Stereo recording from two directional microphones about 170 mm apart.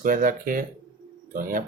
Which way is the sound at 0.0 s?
55° right (ahead or behind).